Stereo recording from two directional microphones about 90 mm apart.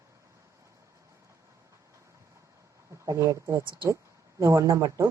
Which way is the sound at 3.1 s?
35° right (ahead or behind).